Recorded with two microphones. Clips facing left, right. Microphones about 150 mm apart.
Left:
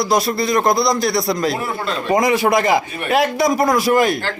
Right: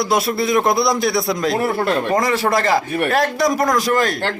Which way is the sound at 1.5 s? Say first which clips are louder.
Right 5 dB; 60° right (ahead or behind).